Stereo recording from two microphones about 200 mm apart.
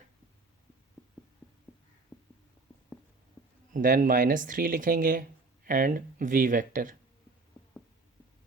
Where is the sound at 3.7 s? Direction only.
40° right (ahead or behind).